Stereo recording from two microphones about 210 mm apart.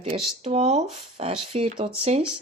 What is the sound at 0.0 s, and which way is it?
Speech, 30° right (ahead or behind).